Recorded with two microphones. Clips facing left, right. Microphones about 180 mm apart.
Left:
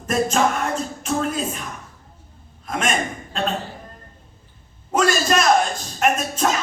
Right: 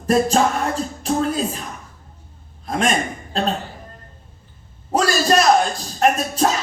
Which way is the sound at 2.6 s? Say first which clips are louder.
Right 3 dB; 35° right (ahead or behind).